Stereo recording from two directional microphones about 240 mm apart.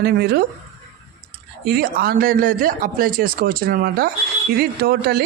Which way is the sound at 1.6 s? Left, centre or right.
Right.